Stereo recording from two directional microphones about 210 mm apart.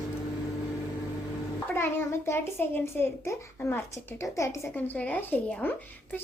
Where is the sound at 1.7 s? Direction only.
10° left (ahead or behind).